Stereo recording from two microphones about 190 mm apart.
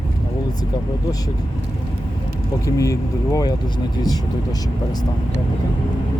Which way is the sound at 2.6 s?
15° left (ahead or behind).